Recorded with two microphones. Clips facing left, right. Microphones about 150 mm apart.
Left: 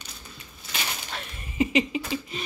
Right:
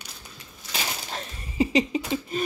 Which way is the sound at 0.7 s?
35° right (ahead or behind).